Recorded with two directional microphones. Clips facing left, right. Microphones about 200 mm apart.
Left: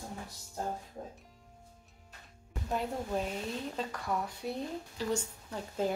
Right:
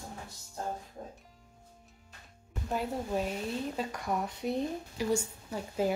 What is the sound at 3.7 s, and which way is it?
A woman's voice, 15° right (ahead or behind).